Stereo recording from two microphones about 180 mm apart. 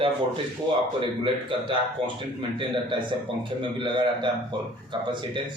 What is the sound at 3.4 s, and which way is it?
A man's voice, 25° right (ahead or behind).